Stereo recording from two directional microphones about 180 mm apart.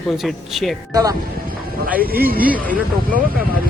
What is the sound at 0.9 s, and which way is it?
Speech, 20° right (ahead or behind).